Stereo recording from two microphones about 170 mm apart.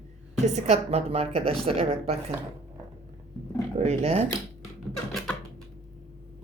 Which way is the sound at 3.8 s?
40° right (ahead or behind).